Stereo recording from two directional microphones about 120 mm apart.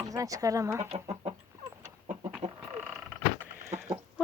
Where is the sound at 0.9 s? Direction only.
55° right (ahead or behind).